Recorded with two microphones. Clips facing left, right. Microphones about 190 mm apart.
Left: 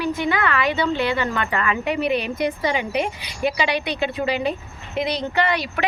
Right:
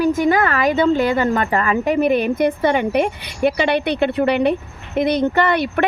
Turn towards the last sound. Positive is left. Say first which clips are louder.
# right 5 dB
turn(degrees=-50)  # may be behind; listen again after turning